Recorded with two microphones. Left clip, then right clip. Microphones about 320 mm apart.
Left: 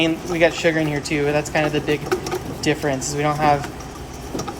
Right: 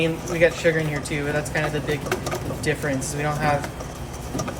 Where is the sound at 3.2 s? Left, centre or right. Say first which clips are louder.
Left 6 dB; left.